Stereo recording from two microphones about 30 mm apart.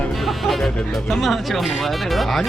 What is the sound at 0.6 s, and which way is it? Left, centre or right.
Speech, centre.